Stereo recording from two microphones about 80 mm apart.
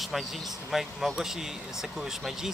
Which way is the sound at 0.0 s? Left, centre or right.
Centre.